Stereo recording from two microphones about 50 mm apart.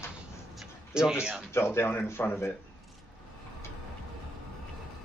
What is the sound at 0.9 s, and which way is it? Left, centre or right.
Speech, centre.